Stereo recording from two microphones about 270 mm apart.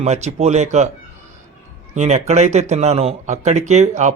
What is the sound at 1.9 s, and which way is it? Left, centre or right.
Speech, right.